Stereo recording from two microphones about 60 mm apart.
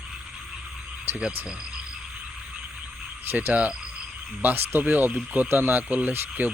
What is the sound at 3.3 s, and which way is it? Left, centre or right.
Speech, right.